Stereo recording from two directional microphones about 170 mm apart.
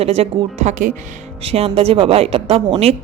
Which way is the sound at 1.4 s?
35° right (ahead or behind).